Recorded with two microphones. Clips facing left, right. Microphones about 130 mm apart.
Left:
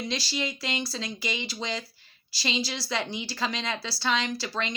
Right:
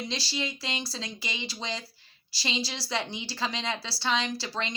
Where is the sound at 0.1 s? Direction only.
30° right (ahead or behind).